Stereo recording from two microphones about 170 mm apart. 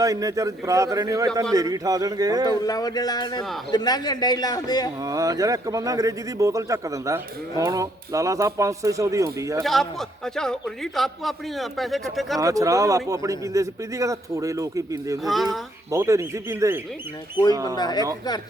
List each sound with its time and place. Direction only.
0.0 s a man's voice: 20° right (ahead or behind)
2.6 s a man's voice: 20° left (ahead or behind)
5.0 s a man's voice: 20° right (ahead or behind)
9.6 s a man's voice: centre (ahead or behind)
12.4 s a man's voice: 20° right (ahead or behind)
15.2 s a man's voice: centre (ahead or behind)
15.9 s a man's voice: 20° right (ahead or behind)
17.7 s a man's voice: 25° left (ahead or behind)